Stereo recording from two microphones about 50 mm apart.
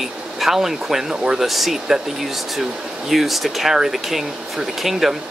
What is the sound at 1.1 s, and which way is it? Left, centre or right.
Speech, centre.